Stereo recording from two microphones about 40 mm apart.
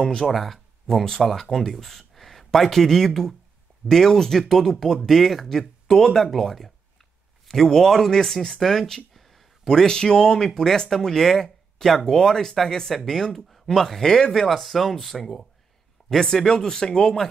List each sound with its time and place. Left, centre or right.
0.3 s speech: centre
14.5 s speech: centre